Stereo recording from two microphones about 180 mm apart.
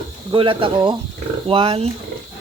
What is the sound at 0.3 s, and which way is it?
Speech, 30° right (ahead or behind).